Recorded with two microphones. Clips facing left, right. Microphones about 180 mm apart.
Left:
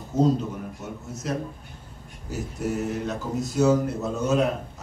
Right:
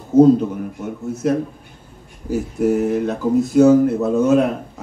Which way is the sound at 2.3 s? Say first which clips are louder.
Right 11 dB; 55° right (ahead or behind).